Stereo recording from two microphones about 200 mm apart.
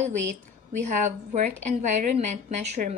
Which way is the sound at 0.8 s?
35° right (ahead or behind).